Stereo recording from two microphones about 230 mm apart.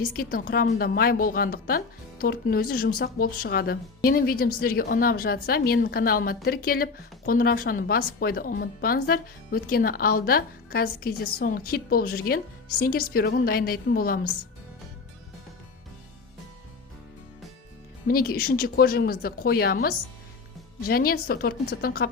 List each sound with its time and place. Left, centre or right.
0.0 s a woman's voice: left
18.1 s a woman's voice: left